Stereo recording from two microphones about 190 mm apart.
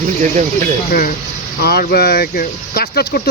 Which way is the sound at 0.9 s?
50° left (ahead or behind).